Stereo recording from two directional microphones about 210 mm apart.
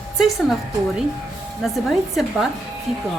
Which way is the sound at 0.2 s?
Centre (ahead or behind).